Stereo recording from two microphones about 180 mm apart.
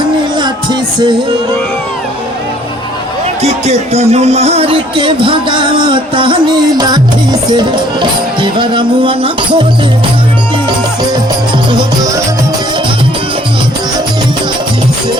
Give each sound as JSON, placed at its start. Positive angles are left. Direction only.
{"t": 0.3, "sound": "music", "side_deg": -25}
{"t": 3.4, "sound": "speech", "side_deg": -35}
{"t": 11.7, "sound": "music", "side_deg": -25}